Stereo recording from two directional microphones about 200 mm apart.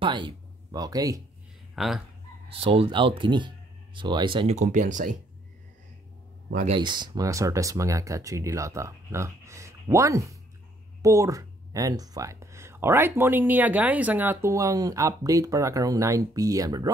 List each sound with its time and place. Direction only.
0.0 s speech: 25° right (ahead or behind)
1.8 s speech: centre (ahead or behind)
2.5 s speech: 30° right (ahead or behind)
6.5 s speech: 35° right (ahead or behind)
6.8 s speech: 20° right (ahead or behind)